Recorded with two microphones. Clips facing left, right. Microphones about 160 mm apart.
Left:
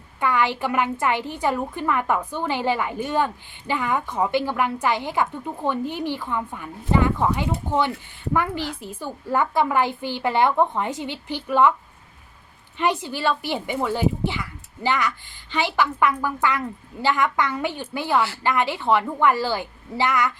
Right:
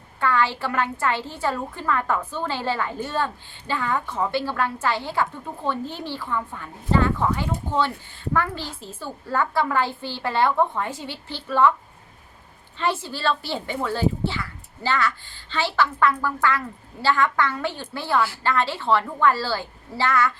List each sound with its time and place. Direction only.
0.2 s a woman's voice: 15° left (ahead or behind)
12.7 s a woman's voice: 15° left (ahead or behind)